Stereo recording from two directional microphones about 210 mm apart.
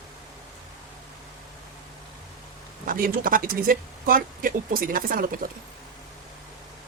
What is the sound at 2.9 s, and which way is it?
Speech, 40° right (ahead or behind).